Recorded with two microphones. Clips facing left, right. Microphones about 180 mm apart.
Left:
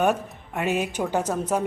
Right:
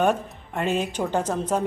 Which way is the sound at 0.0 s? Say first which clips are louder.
Right 1 dB; 10° left (ahead or behind).